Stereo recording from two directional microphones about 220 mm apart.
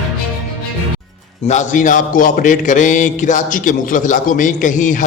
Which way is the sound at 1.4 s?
30° left (ahead or behind).